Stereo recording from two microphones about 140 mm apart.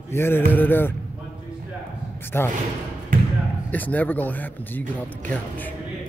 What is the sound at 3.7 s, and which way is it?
Speech, 10° left (ahead or behind).